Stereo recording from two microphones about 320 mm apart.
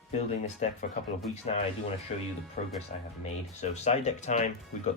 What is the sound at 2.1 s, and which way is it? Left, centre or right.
Speech, left.